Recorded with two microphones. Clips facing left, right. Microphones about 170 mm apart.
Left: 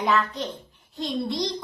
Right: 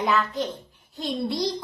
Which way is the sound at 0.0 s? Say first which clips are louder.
Even; centre (ahead or behind).